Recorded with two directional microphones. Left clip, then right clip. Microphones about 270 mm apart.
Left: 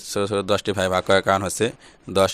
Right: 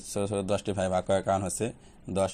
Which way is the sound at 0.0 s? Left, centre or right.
Left.